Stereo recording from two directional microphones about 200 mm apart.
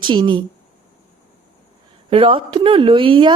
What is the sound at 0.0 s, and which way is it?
Speech, 25° right (ahead or behind).